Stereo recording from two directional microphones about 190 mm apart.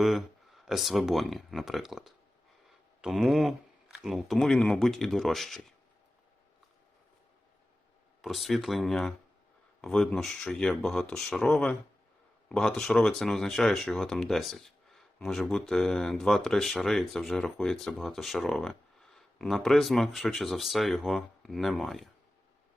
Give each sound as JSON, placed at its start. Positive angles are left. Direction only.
{"t": 0.0, "sound": "speech", "side_deg": 0}
{"t": 8.2, "sound": "speech", "side_deg": 0}